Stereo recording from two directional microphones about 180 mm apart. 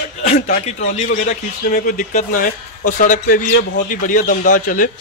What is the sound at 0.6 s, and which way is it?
A man's voice, 35° left (ahead or behind).